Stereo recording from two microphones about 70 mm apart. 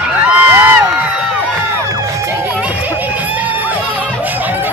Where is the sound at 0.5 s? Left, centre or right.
Right.